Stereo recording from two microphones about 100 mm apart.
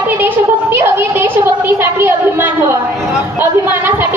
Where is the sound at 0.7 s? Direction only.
25° right (ahead or behind).